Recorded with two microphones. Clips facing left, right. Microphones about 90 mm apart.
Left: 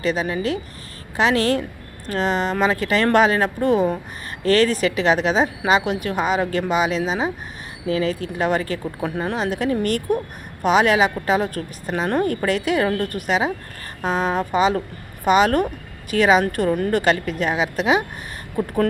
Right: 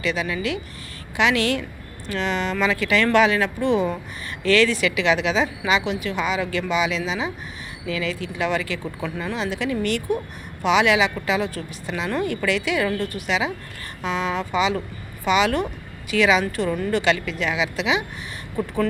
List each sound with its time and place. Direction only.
0.0 s speech: 40° left (ahead or behind)